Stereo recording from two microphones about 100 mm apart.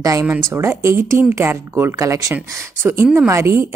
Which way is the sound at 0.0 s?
35° right (ahead or behind).